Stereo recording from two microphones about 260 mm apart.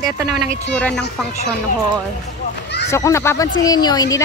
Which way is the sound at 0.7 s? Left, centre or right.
Centre.